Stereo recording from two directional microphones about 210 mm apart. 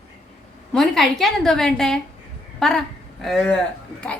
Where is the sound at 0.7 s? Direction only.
Centre (ahead or behind).